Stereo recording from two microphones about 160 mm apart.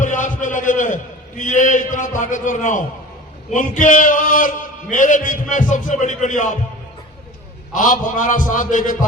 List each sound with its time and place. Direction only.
0.0 s a sound: 50° left (ahead or behind)
1.4 s a man's voice: 50° left (ahead or behind)
7.7 s a man's voice: 55° left (ahead or behind)